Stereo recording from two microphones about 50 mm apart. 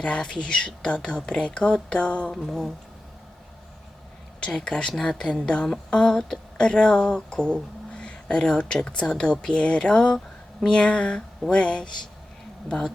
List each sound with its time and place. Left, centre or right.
0.0 s speech: centre
2.3 s a sound: centre
4.4 s a woman's voice: centre